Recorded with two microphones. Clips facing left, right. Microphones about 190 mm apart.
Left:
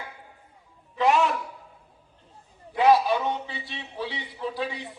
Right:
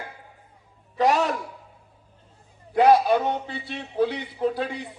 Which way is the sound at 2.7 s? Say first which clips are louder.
Right 3 dB; 50° right (ahead or behind).